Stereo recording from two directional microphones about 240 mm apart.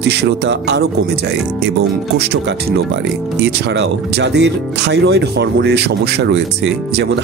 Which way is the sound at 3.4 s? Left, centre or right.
Right.